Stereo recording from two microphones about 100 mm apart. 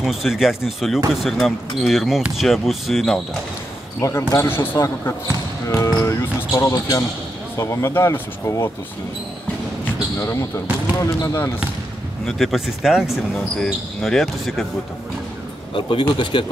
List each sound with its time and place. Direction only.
0.0 s speech: centre (ahead or behind)
4.0 s speech: 30° left (ahead or behind)
11.0 s speech: 30° left (ahead or behind)
12.3 s speech: centre (ahead or behind)
15.7 s speech: 55° left (ahead or behind)